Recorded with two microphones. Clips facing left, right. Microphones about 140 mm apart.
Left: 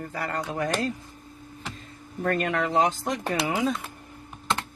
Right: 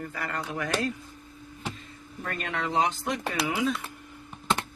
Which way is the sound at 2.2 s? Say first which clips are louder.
Left 7 dB; 55° left (ahead or behind).